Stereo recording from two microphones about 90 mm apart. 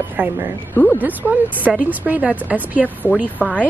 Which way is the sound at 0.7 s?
20° left (ahead or behind).